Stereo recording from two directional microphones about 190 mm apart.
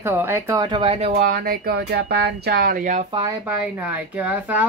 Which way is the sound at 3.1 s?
20° right (ahead or behind).